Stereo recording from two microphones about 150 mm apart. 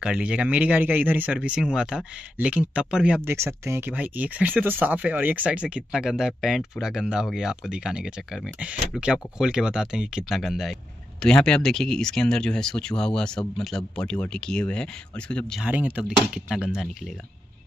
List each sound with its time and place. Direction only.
0.0 s speech: 5° right (ahead or behind)
3.3 s speech: 15° right (ahead or behind); by 15.6 s 5° left (ahead or behind)
15.6 s speech: 10° right (ahead or behind)